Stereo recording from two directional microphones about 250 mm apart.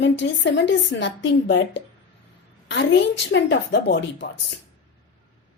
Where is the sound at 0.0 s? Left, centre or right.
Left.